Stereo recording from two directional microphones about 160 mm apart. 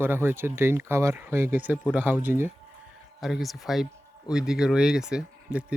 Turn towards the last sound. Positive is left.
turn(degrees=-5)  # may be behind; listen again after turning